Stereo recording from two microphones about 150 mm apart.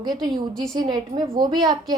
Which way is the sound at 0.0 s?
25° right (ahead or behind).